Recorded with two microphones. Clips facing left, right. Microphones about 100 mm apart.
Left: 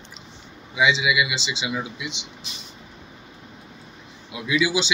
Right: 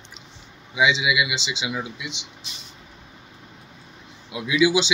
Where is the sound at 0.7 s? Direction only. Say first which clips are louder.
Even; 5° right (ahead or behind).